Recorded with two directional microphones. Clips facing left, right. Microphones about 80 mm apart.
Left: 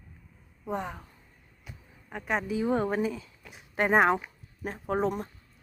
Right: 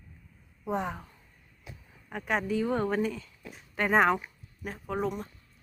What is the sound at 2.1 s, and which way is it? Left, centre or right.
Speech, centre.